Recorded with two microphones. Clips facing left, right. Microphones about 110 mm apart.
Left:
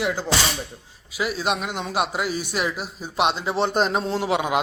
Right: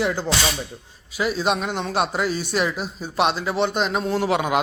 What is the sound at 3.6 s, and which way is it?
Speech, 40° left (ahead or behind).